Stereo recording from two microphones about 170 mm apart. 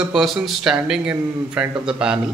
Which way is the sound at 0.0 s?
Centre (ahead or behind).